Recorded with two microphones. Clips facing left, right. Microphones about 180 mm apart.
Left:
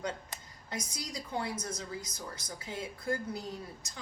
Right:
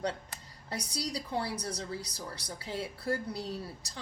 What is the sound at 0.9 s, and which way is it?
A woman's voice, 35° right (ahead or behind).